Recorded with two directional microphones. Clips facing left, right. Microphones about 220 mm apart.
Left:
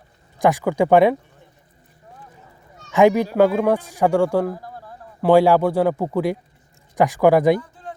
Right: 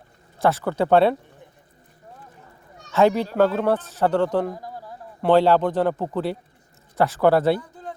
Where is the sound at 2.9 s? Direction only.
15° left (ahead or behind).